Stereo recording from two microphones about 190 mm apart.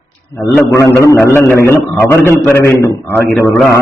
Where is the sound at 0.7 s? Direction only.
15° left (ahead or behind).